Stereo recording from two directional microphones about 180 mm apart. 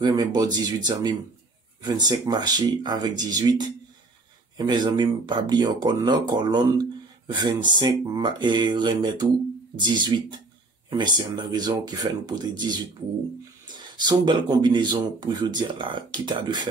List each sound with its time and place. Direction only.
0.0 s speech: 20° right (ahead or behind)
13.7 s speech: 25° right (ahead or behind)